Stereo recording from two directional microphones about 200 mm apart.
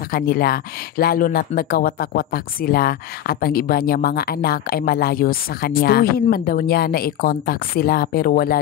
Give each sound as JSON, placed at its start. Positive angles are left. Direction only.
{"t": 0.1, "sound": "speech", "side_deg": 50}